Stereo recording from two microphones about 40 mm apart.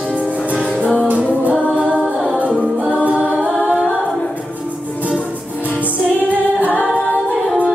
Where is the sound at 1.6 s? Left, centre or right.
Right.